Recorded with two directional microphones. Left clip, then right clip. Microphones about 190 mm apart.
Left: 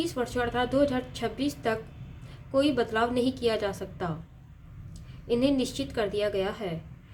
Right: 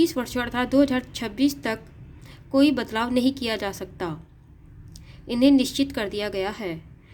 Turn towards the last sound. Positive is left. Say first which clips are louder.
# right 1 dB
turn(degrees=-40)  # may be behind; listen again after turning